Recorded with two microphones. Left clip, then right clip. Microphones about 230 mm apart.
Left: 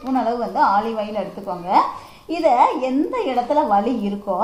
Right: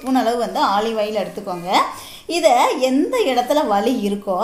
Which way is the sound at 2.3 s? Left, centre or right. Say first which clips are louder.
Right 1 dB; right.